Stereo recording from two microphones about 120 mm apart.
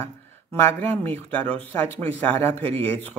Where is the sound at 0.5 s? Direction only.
15° left (ahead or behind).